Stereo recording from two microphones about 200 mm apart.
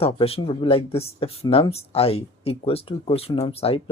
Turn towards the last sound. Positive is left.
turn(degrees=30)  # may be behind; listen again after turning